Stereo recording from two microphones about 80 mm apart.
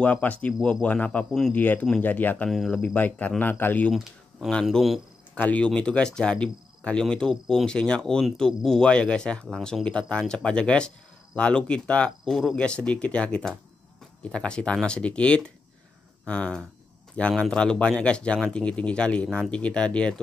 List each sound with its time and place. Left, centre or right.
0.0 s speech: centre
4.6 s speech: centre
5.3 s speech: centre